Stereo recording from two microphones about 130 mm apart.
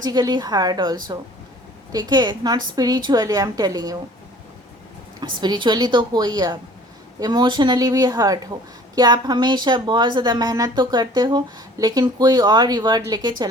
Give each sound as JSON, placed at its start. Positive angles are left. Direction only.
{"t": 0.0, "sound": "a woman's voice", "side_deg": -30}
{"t": 5.2, "sound": "a woman's voice", "side_deg": -35}